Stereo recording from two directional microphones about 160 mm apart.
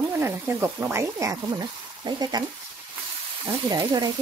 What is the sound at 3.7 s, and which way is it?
Speech, 25° right (ahead or behind).